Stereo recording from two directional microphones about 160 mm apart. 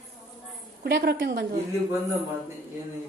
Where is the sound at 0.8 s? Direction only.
85° right.